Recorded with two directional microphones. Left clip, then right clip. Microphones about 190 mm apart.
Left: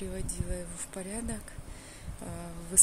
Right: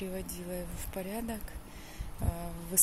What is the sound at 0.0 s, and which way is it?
Speech, centre (ahead or behind).